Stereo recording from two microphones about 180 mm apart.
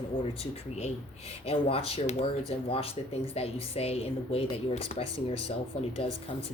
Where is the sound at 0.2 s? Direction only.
35° left (ahead or behind).